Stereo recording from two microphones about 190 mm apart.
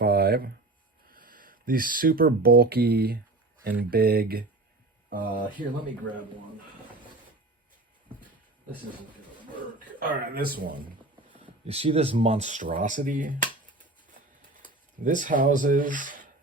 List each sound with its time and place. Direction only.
0.0 s a sound: 55° right (ahead or behind)
1.1 s speech: 50° right (ahead or behind)
10.3 s speech: 50° right (ahead or behind)
11.6 s speech: 30° right (ahead or behind)
15.0 s speech: 45° right (ahead or behind)